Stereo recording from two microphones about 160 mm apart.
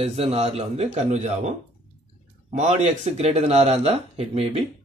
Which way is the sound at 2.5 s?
50° right (ahead or behind).